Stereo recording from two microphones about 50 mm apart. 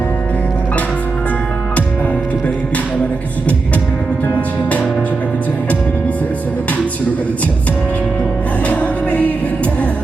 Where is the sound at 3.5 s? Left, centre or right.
Left.